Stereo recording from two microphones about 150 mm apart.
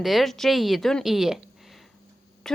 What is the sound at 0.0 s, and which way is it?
Speech, centre (ahead or behind).